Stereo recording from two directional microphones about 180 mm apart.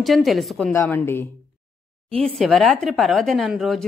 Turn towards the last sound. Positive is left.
turn(degrees=0)  # may be behind; listen again after turning